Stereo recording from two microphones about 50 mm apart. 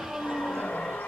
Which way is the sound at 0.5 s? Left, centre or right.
Left.